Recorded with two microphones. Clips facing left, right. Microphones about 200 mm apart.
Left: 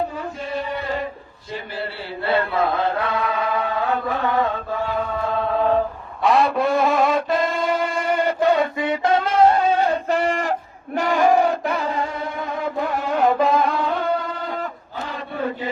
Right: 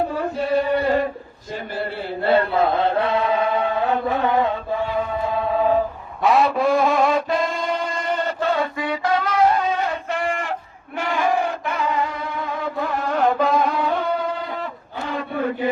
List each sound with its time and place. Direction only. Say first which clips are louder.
0.2 s chant: right 7 dB; 60° right (ahead or behind)
2.5 s chant: right 2 dB; 30° right (ahead or behind)
5.5 s a sound: even; 5° right (ahead or behind)
6.2 s music: right 1 dB; centre (ahead or behind); by 10.5 s 35° left (ahead or behind)
10.9 s singing: left 4 dB; 40° left (ahead or behind)
13.1 s music: left 1 dB; 5° left (ahead or behind)